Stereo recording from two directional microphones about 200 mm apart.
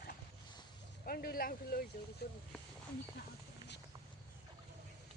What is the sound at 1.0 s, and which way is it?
Speech, 50° left (ahead or behind).